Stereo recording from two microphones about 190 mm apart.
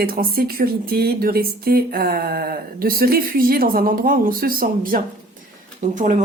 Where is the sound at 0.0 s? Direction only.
50° right (ahead or behind).